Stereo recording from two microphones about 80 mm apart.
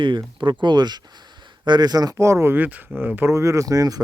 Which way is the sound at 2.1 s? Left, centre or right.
Right.